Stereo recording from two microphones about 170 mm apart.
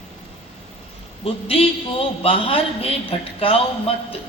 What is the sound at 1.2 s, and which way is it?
A man's voice, 35° left (ahead or behind).